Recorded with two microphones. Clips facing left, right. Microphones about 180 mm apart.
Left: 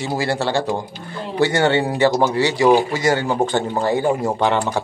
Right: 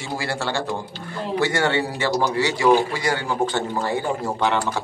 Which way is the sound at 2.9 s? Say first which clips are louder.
Left 5 dB; 40° left (ahead or behind).